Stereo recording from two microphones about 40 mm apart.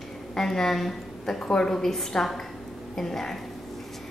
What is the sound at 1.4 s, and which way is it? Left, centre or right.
Speech, centre.